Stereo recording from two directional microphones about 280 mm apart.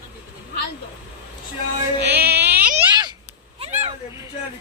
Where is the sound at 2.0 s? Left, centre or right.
Right.